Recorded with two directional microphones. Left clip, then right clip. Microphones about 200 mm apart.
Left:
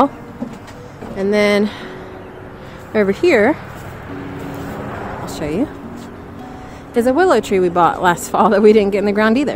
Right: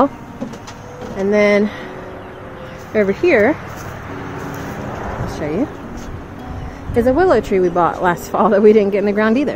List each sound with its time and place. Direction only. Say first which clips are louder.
1.3 s a woman's voice: right 1 dB; 10° left (ahead or behind)
2.9 s speech: even; 25° left (ahead or behind)
5.3 s a sound: even; 15° left (ahead or behind)
7.0 s a woman's voice: even; 10° left (ahead or behind)